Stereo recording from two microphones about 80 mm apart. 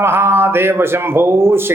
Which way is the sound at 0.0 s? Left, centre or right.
Right.